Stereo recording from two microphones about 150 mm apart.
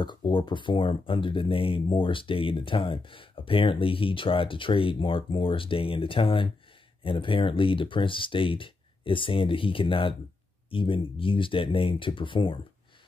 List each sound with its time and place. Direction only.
0.0 s speech: 30° left (ahead or behind)